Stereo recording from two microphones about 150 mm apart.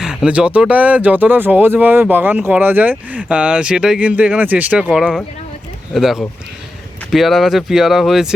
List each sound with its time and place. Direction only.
0.0 s speech: 5° right (ahead or behind)